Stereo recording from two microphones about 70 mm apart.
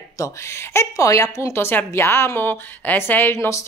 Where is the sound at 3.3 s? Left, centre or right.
Left.